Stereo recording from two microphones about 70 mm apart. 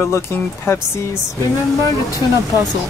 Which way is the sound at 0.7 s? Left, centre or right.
Left.